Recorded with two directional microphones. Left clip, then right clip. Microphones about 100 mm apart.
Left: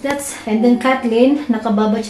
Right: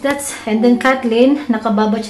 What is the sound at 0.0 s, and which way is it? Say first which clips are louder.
A woman's voice: right 3 dB; 20° right (ahead or behind).